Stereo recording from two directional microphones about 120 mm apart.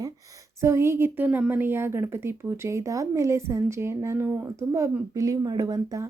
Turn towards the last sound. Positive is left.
turn(degrees=-30)  # may be behind; listen again after turning